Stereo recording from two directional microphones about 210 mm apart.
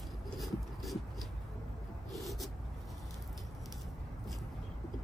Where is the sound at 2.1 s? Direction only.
Centre (ahead or behind).